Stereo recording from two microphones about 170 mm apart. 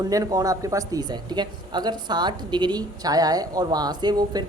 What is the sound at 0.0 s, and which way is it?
Speech, 20° right (ahead or behind).